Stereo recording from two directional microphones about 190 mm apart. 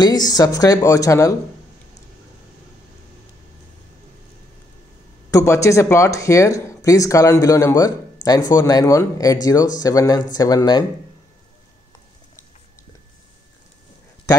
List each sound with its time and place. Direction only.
0.0 s speech: 20° left (ahead or behind)
5.3 s speech: 15° left (ahead or behind)